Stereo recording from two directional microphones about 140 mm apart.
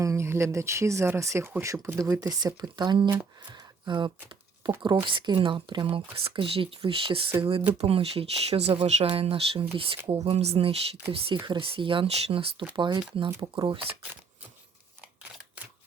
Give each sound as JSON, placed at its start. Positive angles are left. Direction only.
{"t": 0.0, "sound": "speech", "side_deg": -20}